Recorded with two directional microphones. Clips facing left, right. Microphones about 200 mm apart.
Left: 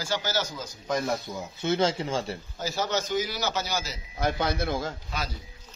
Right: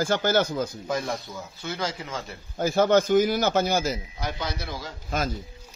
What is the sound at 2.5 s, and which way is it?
A man's voice, 55° right (ahead or behind).